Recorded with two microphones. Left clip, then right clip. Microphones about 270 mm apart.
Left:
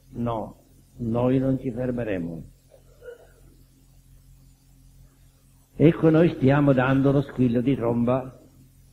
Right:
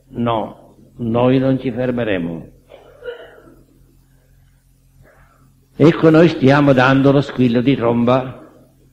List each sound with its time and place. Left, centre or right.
0.2 s a man's voice: right
5.8 s a man's voice: right